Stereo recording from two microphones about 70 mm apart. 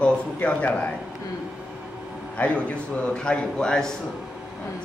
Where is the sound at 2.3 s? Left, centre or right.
Centre.